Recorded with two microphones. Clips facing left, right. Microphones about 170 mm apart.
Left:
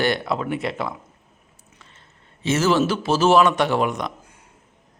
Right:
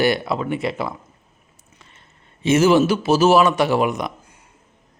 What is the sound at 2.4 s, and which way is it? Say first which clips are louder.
A man's voice: right 5 dB; 15° right (ahead or behind).